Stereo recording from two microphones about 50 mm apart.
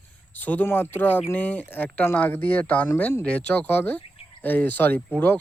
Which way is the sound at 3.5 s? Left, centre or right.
Left.